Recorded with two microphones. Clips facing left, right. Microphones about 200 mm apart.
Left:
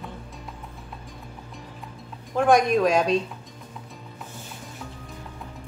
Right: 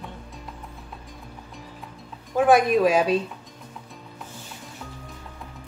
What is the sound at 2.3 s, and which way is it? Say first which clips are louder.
Speech: right 1 dB; 5° right (ahead or behind).